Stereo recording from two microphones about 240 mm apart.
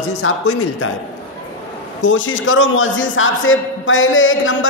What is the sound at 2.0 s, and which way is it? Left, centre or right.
A man's voice, left.